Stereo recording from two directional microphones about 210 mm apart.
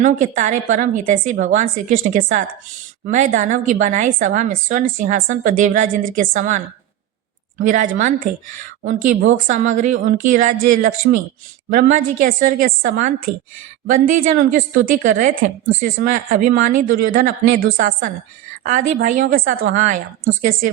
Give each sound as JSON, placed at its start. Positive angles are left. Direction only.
{"t": 0.0, "sound": "a woman's voice", "side_deg": -35}
{"t": 7.6, "sound": "a woman's voice", "side_deg": -40}
{"t": 18.6, "sound": "a woman's voice", "side_deg": -40}